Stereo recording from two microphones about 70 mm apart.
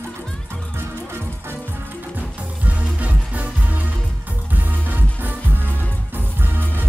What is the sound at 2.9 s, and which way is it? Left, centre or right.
Music, right.